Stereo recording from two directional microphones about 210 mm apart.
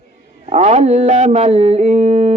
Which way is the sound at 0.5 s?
35° right (ahead or behind).